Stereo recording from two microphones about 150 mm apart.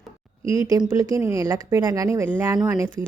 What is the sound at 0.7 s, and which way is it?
A woman's voice, 20° right (ahead or behind).